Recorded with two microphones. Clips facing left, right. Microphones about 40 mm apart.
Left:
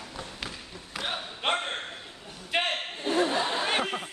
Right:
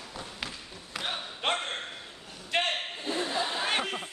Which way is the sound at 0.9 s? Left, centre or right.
Centre.